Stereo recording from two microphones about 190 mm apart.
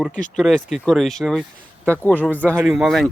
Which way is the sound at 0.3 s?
Centre (ahead or behind).